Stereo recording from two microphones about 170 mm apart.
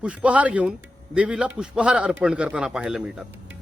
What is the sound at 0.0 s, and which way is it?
Speech, 5° right (ahead or behind).